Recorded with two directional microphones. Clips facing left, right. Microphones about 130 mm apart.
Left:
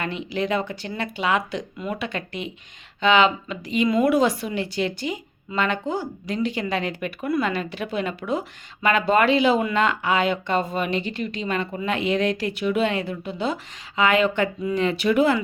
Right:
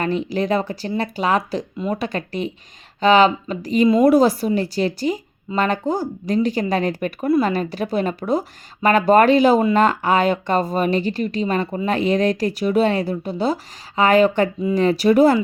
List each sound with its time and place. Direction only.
0.0 s speech: 40° right (ahead or behind)